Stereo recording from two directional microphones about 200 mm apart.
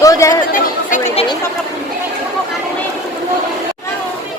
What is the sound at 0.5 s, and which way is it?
Chatter, 40° left (ahead or behind).